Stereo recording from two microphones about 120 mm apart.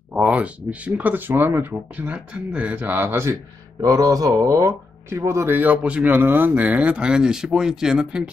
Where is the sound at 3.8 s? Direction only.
30° right (ahead or behind); by 8.3 s 5° right (ahead or behind).